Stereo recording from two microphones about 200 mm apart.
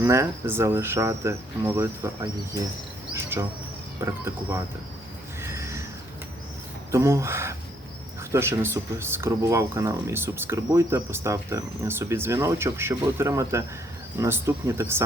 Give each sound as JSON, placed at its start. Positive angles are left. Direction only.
{"t": 0.0, "sound": "speech", "side_deg": -15}
{"t": 3.2, "sound": "insect", "side_deg": -10}
{"t": 4.0, "sound": "speech", "side_deg": -15}
{"t": 5.4, "sound": "a sound", "side_deg": -15}
{"t": 6.9, "sound": "speech", "side_deg": -15}